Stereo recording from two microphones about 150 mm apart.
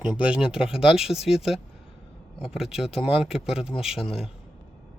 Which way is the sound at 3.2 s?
5° right (ahead or behind).